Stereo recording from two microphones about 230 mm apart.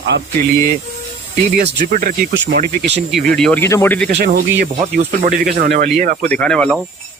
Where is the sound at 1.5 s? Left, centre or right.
Right.